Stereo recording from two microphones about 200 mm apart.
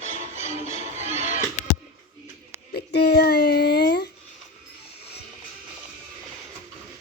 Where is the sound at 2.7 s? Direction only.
55° left (ahead or behind).